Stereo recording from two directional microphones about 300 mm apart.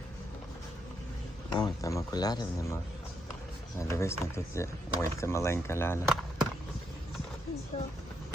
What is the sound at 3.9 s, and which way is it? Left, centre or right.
Speech, centre.